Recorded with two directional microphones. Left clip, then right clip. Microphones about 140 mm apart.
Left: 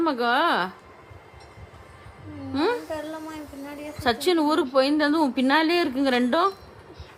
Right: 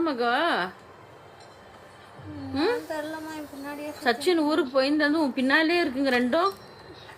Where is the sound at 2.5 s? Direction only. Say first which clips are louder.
Left 1 dB; 30° left (ahead or behind).